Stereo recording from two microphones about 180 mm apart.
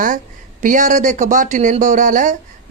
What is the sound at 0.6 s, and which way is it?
Speech, 45° right (ahead or behind).